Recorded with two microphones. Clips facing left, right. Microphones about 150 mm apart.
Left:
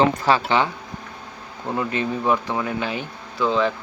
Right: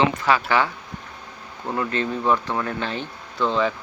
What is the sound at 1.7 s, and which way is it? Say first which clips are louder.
Speech: left 1 dB; 15° left (ahead or behind).